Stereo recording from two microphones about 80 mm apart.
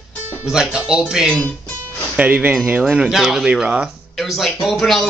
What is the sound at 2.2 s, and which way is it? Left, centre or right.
Speech, centre.